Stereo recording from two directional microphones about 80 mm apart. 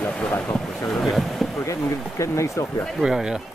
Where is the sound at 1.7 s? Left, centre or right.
Left.